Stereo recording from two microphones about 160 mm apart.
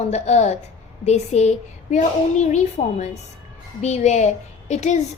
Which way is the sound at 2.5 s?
45° left (ahead or behind).